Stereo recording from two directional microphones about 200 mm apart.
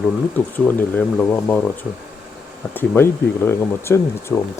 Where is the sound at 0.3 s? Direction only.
10° left (ahead or behind).